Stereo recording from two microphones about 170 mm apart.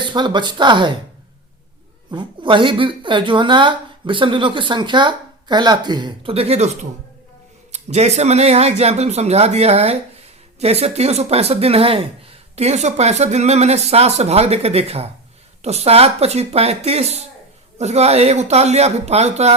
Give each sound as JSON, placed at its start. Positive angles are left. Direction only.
{"t": 0.0, "sound": "speech", "side_deg": -25}
{"t": 2.0, "sound": "speech", "side_deg": -30}
{"t": 7.7, "sound": "speech", "side_deg": -40}